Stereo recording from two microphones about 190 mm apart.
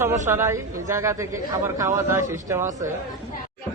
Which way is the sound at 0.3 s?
15° right (ahead or behind).